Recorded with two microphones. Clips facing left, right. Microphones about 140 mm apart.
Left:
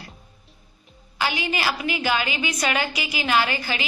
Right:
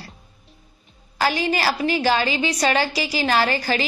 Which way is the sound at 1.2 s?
40° right (ahead or behind).